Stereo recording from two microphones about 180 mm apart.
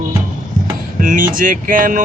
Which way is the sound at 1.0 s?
50° right (ahead or behind).